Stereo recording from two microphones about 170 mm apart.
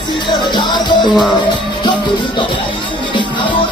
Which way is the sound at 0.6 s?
25° left (ahead or behind).